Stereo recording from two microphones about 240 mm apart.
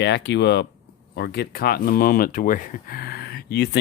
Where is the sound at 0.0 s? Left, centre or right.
Left.